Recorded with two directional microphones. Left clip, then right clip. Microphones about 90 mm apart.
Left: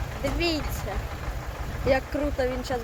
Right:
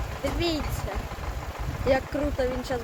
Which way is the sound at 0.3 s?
Centre (ahead or behind).